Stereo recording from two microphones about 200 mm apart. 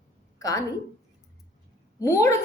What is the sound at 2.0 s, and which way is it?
Speech, 15° left (ahead or behind).